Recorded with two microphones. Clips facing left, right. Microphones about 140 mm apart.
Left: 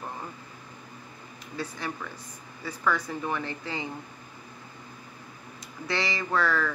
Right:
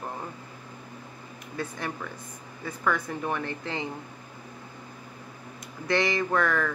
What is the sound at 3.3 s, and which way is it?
Speech, 50° right (ahead or behind).